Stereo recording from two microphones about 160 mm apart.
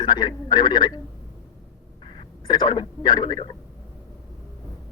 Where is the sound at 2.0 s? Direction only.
30° left (ahead or behind).